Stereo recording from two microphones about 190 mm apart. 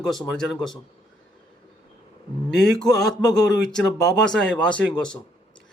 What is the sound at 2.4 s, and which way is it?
Speech, centre (ahead or behind).